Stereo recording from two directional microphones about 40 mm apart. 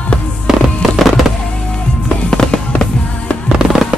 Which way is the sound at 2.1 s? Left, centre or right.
Left.